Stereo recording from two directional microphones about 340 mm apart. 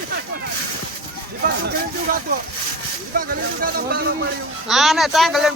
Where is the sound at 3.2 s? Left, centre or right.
Right.